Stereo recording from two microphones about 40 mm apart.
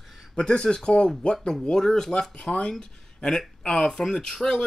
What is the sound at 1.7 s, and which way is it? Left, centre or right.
Speech, centre.